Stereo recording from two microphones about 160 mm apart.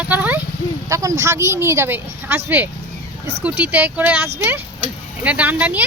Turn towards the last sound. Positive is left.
turn(degrees=-10)  # may be behind; listen again after turning